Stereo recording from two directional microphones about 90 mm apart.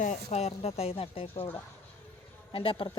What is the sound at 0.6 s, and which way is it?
Speech, 90° left.